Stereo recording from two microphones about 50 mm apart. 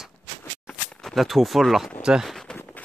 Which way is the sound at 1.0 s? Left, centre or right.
Centre.